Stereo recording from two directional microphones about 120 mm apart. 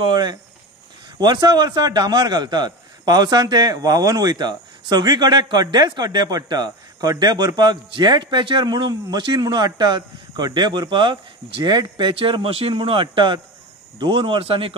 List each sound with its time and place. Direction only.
0.0 s a man's voice: 40° right (ahead or behind)